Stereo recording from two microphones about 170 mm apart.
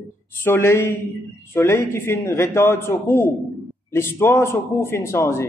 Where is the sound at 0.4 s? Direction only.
15° left (ahead or behind).